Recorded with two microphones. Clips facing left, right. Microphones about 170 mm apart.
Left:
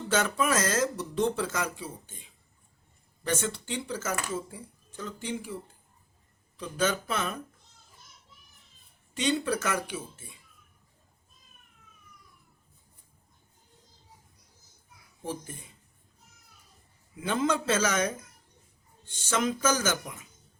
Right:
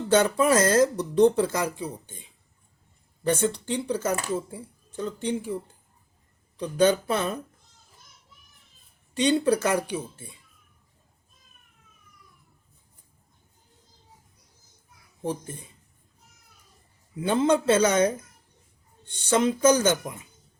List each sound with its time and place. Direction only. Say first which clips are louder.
0.1 s speech: right 7 dB; 30° right (ahead or behind)
3.2 s speech: right 7 dB; 35° right (ahead or behind)
6.6 s speech: right 8 dB; 35° right (ahead or behind)
9.1 s speech: right 6 dB; 35° right (ahead or behind)
15.2 s speech: right 6 dB; 35° right (ahead or behind)
17.2 s speech: right 6 dB; 30° right (ahead or behind)
19.3 s speech: right 7 dB; 30° right (ahead or behind)